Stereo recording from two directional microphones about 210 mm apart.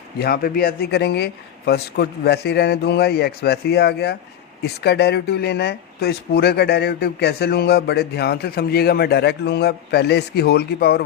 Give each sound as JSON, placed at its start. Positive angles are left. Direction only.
{"t": 0.2, "sound": "speech", "side_deg": 45}